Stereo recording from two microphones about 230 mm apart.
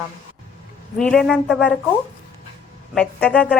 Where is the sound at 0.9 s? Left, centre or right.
Centre.